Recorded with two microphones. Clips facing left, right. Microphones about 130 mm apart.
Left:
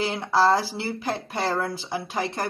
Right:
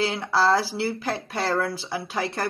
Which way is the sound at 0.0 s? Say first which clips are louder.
Left 1 dB; 15° left (ahead or behind).